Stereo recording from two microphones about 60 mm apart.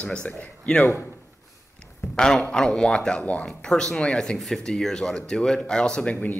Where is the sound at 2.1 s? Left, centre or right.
Centre.